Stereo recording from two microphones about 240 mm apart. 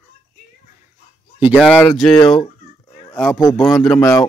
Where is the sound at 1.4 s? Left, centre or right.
Centre.